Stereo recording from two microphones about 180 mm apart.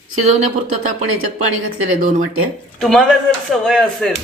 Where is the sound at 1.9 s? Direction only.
50° right (ahead or behind).